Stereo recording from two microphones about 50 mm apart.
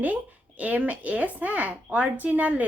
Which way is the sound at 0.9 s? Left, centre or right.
Right.